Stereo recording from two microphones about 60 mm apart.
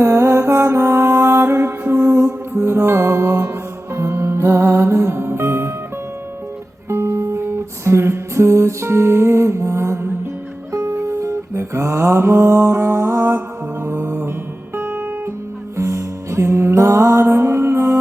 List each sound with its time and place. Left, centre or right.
0.0 s music: right
6.8 s music: right
10.9 s music: right
14.8 s guitar: right
15.8 s music: right